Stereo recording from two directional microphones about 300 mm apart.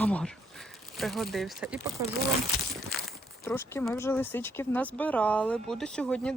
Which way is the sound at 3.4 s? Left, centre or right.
Centre.